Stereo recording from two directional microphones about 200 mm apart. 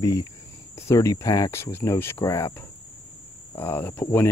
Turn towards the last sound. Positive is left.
turn(degrees=10)  # may be behind; listen again after turning